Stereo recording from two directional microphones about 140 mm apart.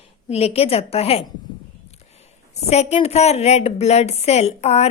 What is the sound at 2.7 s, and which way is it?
A woman's voice, 50° left (ahead or behind).